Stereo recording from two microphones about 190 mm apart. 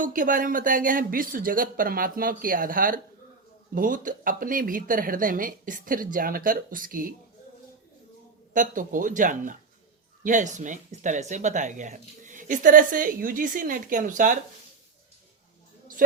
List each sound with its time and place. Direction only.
0.0 s speech: 45° right (ahead or behind)
8.5 s speech: 45° right (ahead or behind)